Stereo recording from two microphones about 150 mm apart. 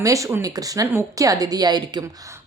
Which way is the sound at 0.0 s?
20° right (ahead or behind).